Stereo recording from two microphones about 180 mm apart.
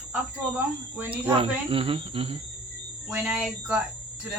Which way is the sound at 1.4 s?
30° right (ahead or behind).